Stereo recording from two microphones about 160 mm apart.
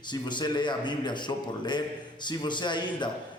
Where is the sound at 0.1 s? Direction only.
30° left (ahead or behind).